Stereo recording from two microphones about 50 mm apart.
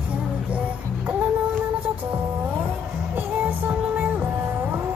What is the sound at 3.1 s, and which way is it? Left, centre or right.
Music, right.